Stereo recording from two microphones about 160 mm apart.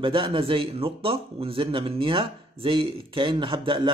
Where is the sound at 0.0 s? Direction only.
35° right (ahead or behind).